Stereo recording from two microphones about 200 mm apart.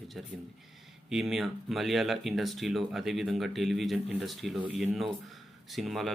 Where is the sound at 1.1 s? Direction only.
Centre (ahead or behind).